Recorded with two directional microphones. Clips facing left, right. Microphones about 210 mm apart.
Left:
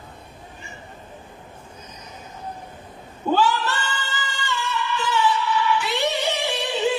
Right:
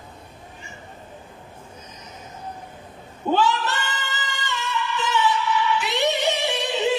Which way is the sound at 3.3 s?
20° right (ahead or behind).